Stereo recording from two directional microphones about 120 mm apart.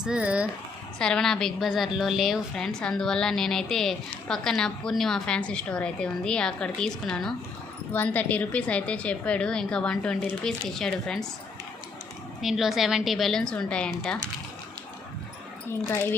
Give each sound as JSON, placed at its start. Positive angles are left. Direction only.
{"t": 0.0, "sound": "speech", "side_deg": -10}
{"t": 0.9, "sound": "a woman's voice", "side_deg": 5}
{"t": 12.4, "sound": "a woman's voice", "side_deg": 0}
{"t": 15.7, "sound": "speech", "side_deg": 20}